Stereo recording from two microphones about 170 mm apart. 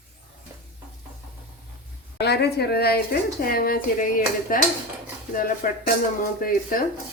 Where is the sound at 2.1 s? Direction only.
75° left (ahead or behind); by 5.9 s 55° left (ahead or behind).